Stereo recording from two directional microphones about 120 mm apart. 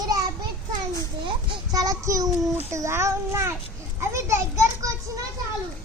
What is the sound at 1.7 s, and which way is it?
Child singing, 30° right (ahead or behind).